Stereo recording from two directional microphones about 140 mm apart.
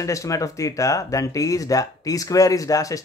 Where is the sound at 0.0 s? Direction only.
20° left (ahead or behind).